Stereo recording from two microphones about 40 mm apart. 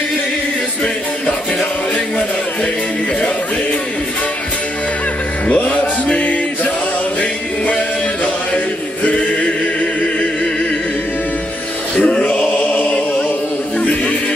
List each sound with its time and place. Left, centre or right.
6.1 s music: left
12.0 s choir: left